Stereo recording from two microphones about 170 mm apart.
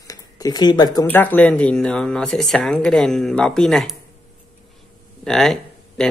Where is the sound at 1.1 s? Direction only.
10° left (ahead or behind).